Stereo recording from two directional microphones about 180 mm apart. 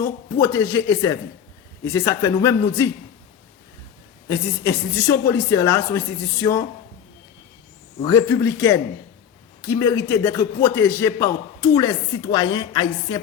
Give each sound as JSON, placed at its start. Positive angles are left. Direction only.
{"t": 0.0, "sound": "a man's voice", "side_deg": 15}
{"t": 4.3, "sound": "a man's voice", "side_deg": 15}
{"t": 8.0, "sound": "a man's voice", "side_deg": 15}